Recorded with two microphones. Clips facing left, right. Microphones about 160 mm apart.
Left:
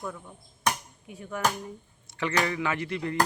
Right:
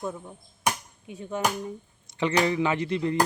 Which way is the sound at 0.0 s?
25° right (ahead or behind).